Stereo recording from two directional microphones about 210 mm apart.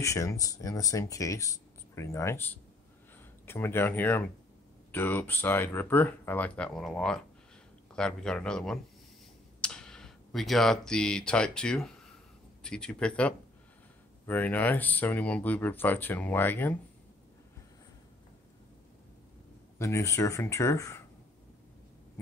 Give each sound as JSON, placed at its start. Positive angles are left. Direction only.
{"t": 0.0, "sound": "speech", "side_deg": 15}
{"t": 19.8, "sound": "speech", "side_deg": 15}